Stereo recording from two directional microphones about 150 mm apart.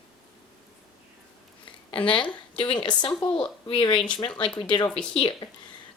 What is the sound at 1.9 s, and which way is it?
A woman's voice, 35° left (ahead or behind).